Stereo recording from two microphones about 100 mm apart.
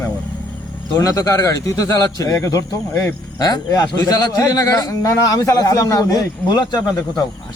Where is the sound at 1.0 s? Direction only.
35° left (ahead or behind).